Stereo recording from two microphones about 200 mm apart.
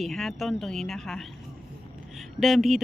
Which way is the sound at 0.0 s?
Centre (ahead or behind).